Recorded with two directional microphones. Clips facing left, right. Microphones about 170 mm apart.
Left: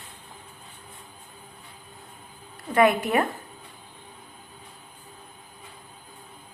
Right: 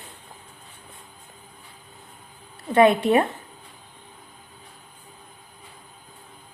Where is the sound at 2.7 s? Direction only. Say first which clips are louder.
Right 4 dB; 30° right (ahead or behind).